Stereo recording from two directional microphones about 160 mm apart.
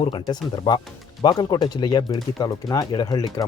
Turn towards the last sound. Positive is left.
turn(degrees=25)  # may be behind; listen again after turning